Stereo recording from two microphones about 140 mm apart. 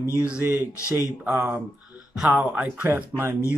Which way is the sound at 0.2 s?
10° right (ahead or behind).